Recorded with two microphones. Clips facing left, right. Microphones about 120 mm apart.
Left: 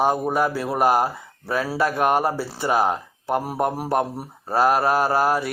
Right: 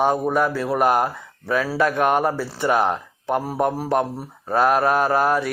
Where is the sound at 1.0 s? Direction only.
35° left (ahead or behind).